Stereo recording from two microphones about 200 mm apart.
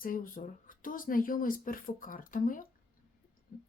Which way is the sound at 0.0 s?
45° left (ahead or behind).